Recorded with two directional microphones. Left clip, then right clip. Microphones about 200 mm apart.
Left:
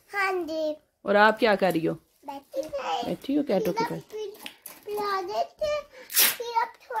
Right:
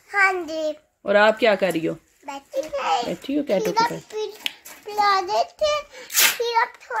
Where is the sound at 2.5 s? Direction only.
35° right (ahead or behind).